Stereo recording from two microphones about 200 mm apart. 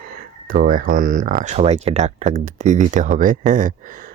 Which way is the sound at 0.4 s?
45° right (ahead or behind).